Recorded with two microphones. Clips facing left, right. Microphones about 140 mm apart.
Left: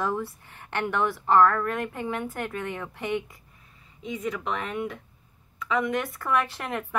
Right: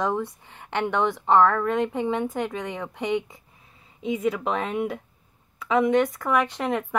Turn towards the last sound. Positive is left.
turn(degrees=-15)  # may be behind; listen again after turning